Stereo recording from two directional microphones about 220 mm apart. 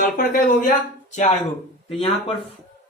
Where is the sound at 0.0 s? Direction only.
40° left (ahead or behind).